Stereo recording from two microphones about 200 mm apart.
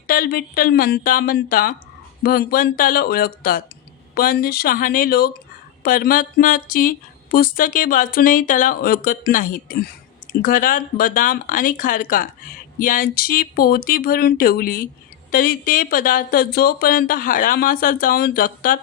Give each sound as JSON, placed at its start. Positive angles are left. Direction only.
{"t": 0.1, "sound": "speech", "side_deg": 50}